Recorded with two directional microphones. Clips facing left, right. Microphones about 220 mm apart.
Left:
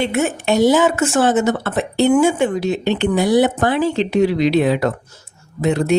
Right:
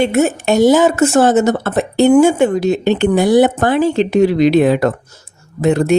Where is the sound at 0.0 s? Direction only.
40° right (ahead or behind).